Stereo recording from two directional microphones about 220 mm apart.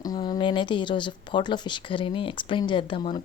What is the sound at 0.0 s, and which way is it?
Speech, 20° left (ahead or behind).